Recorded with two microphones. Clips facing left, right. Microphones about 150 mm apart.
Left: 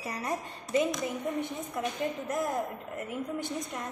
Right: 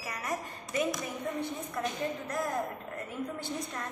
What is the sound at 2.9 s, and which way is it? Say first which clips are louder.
Speech: left 4 dB; 20° left (ahead or behind).